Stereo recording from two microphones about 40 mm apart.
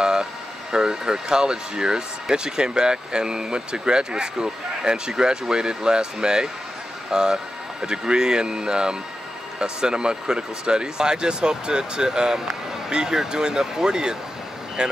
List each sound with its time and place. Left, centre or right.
0.0 s speech: centre